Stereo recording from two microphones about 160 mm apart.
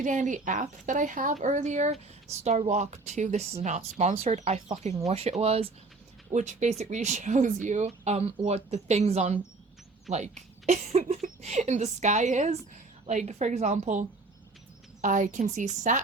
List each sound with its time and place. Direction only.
0.0 s speech: 50° right (ahead or behind)
6.3 s speech: 50° right (ahead or behind)